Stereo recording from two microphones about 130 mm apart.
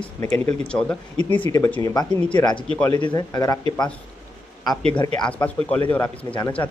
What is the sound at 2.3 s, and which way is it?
Speech, 35° left (ahead or behind).